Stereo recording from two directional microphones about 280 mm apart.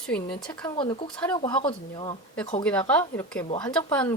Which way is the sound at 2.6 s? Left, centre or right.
Centre.